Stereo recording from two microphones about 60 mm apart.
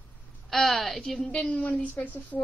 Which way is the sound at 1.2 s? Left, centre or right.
Centre.